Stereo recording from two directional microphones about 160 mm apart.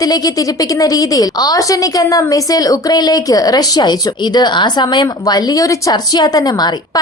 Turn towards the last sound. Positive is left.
turn(degrees=25)  # may be behind; listen again after turning